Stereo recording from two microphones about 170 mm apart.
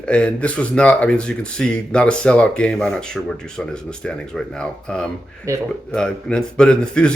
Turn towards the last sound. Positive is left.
turn(degrees=5)  # may be behind; listen again after turning